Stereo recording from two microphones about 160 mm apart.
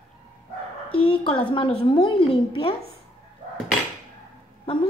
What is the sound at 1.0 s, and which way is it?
A woman's voice, 35° left (ahead or behind).